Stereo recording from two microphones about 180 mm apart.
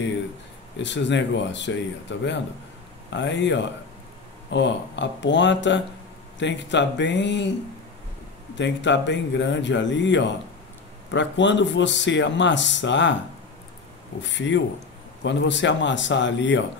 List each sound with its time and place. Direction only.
0.8 s speech: 85° left
8.5 s speech: 85° left
14.2 s speech: 90° left